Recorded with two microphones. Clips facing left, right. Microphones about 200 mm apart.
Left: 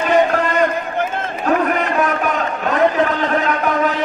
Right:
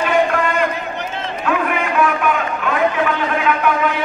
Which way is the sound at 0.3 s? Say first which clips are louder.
Left 2 dB; 45° left (ahead or behind).